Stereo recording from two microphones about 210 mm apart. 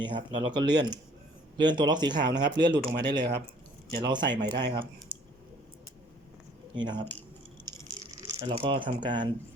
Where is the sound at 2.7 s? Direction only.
55° right (ahead or behind).